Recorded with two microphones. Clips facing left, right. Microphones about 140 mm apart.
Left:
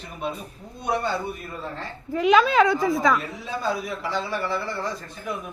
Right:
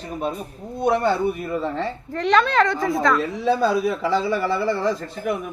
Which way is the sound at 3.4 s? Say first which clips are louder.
Right 13 dB; 80° right.